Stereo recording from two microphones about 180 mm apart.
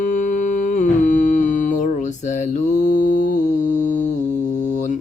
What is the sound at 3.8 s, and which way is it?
Mantra, 45° left (ahead or behind).